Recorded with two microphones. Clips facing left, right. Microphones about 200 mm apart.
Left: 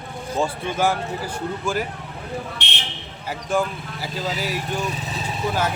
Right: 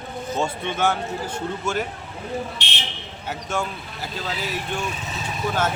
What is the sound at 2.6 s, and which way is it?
Speech, 60° left (ahead or behind).